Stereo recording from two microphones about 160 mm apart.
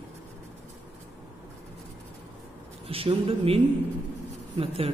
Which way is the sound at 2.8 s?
35° right (ahead or behind).